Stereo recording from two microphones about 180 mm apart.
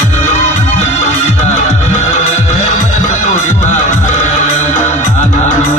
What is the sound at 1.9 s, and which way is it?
Music, 40° left (ahead or behind).